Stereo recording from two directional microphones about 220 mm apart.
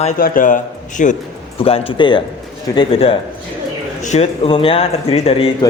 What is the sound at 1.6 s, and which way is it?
A man's voice, 25° left (ahead or behind).